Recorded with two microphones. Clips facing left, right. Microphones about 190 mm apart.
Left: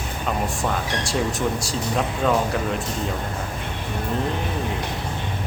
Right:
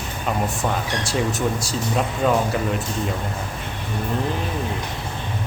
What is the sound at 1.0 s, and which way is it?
Speech, centre (ahead or behind).